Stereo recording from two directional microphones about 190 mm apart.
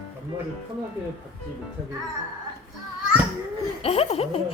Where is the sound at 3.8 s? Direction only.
30° left (ahead or behind).